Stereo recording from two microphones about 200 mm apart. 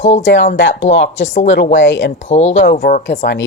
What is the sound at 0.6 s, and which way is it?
Speech, 65° left (ahead or behind).